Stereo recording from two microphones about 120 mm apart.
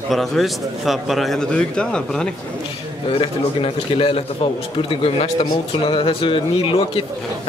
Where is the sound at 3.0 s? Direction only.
50° left (ahead or behind).